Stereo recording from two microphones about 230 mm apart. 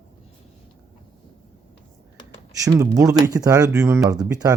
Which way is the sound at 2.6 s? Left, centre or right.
Centre.